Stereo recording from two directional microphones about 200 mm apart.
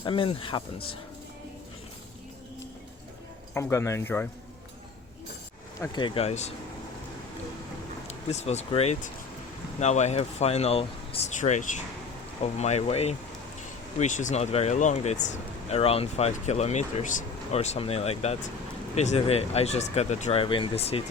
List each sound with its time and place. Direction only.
0.0 s speech: 25° left (ahead or behind)
3.5 s speech: 15° left (ahead or behind)
5.8 s speech: 20° left (ahead or behind)
8.0 s speech: 35° left (ahead or behind)